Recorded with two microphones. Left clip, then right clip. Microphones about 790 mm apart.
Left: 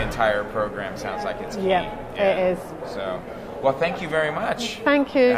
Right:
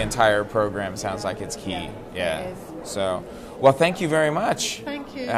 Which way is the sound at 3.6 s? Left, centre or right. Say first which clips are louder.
Right 5 dB; right.